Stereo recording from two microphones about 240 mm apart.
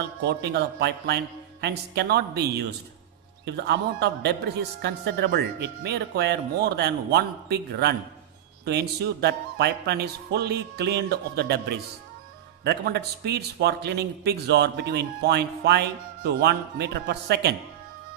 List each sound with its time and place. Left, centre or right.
0.2 s speech: right
9.2 s speech: right